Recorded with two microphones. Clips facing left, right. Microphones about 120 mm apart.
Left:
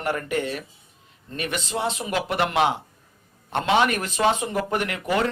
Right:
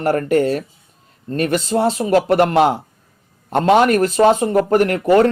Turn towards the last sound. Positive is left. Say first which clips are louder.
# right 11 dB
turn(degrees=-45)  # may be behind; listen again after turning